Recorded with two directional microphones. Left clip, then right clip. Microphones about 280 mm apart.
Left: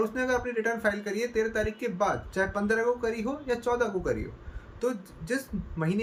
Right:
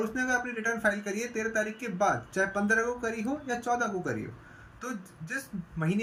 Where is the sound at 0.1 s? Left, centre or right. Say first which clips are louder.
Left 1 dB; centre.